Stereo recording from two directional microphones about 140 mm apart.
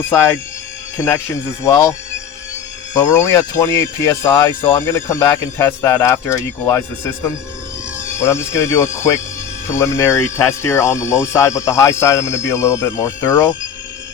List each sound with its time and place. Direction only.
0.0 s speech: 20° left (ahead or behind)